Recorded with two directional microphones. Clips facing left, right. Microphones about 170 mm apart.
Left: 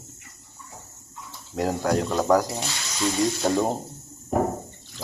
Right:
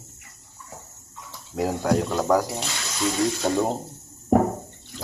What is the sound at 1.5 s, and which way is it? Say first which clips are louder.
Speech: right 1 dB; centre (ahead or behind).